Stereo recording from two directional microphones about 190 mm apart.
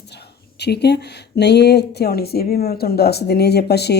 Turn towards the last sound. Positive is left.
turn(degrees=60)  # may be behind; listen again after turning